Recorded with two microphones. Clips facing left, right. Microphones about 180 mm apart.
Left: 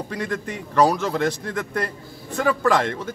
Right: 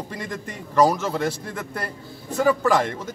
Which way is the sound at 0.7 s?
10° right (ahead or behind).